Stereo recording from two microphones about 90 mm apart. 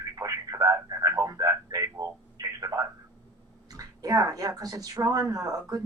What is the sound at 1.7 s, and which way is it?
Telephone, 40° right (ahead or behind).